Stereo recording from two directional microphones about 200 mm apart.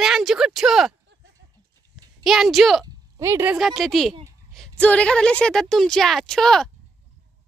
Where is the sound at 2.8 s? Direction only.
15° right (ahead or behind).